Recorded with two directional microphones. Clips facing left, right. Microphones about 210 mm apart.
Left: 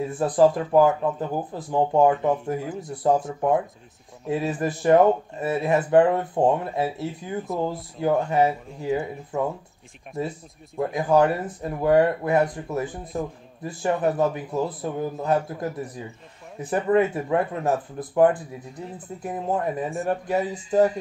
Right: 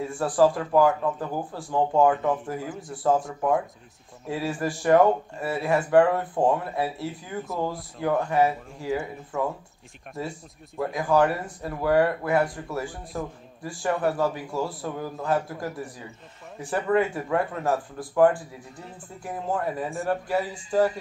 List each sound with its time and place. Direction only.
0.0 s speech: 20° left (ahead or behind)
10.8 s speech: 20° left (ahead or behind)
19.5 s speech: 20° left (ahead or behind)